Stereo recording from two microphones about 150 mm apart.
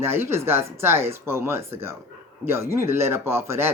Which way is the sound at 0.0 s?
15° right (ahead or behind).